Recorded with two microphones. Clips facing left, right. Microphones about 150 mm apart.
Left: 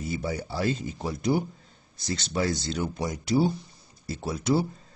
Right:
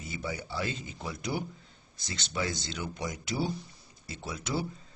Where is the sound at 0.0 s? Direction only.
35° left (ahead or behind).